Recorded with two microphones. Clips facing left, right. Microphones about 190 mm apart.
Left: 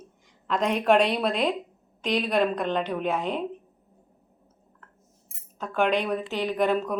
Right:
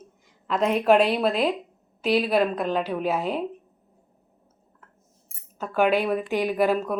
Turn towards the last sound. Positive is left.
turn(degrees=-5)  # may be behind; listen again after turning